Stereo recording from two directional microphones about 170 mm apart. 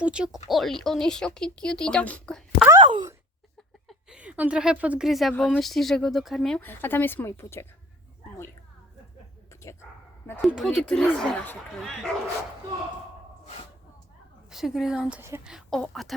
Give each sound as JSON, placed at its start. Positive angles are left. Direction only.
{"t": 0.0, "sound": "speech", "side_deg": -5}
{"t": 2.6, "sound": "a sound", "side_deg": -25}
{"t": 3.8, "sound": "a woman's voice", "side_deg": -5}
{"t": 9.5, "sound": "whispering", "side_deg": 15}
{"t": 10.4, "sound": "speech", "side_deg": 0}
{"t": 14.5, "sound": "speech", "side_deg": 0}
{"t": 15.5, "sound": "speech", "side_deg": 0}